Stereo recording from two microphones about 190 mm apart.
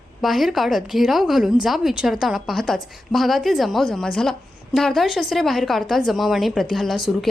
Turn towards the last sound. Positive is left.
turn(degrees=0)  # may be behind; listen again after turning